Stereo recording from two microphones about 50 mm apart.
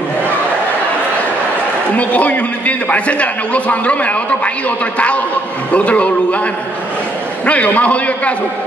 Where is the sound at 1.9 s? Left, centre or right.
Left.